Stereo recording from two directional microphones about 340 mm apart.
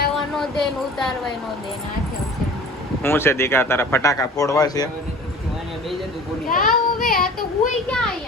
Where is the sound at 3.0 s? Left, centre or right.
Centre.